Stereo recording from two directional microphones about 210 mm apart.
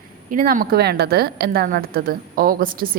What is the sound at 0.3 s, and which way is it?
A woman's voice, 40° right (ahead or behind).